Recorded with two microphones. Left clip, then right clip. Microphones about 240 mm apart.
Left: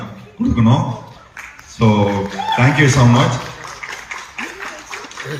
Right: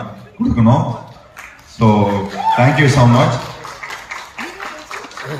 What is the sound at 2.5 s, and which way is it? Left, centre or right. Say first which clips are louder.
Speech: even; centre.